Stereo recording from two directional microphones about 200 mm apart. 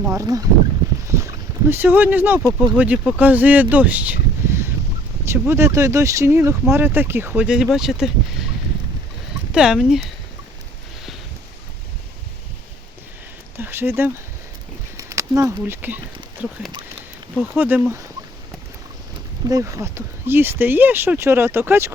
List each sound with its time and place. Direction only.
0.0 s speech: 15° right (ahead or behind)
1.7 s speech: 10° right (ahead or behind)
9.5 s speech: 5° right (ahead or behind)
13.6 s a sound: 10° right (ahead or behind)
14.9 s speech: 15° right (ahead or behind)
19.5 s speech: 15° right (ahead or behind)